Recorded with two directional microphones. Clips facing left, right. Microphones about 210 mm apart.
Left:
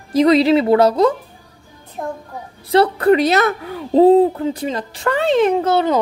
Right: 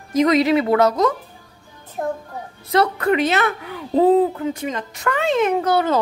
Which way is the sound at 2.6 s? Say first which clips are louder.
Left 5 dB; 30° left (ahead or behind).